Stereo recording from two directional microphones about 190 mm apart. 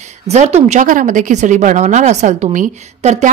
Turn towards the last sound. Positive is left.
turn(degrees=-35)  # may be behind; listen again after turning